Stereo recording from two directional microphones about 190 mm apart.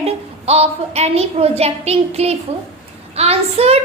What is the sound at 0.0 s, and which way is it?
A woman's voice, 35° right (ahead or behind).